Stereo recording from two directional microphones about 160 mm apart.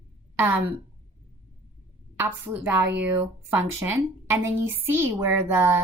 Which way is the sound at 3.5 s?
10° right (ahead or behind).